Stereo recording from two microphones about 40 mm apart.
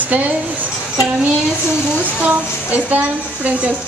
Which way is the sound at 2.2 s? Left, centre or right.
Right.